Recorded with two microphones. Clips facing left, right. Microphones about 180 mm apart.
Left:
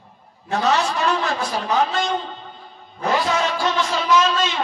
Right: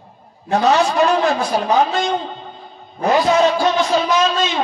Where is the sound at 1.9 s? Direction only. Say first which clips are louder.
Right 3 dB; 20° right (ahead or behind).